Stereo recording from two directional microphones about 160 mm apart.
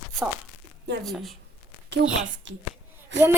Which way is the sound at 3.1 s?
90° right.